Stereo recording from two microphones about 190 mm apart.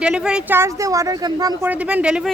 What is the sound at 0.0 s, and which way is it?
Speech, 5° right (ahead or behind).